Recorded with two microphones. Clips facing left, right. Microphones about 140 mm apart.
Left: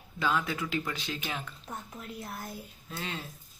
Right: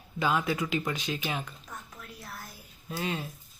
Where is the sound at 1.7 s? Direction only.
25° left (ahead or behind).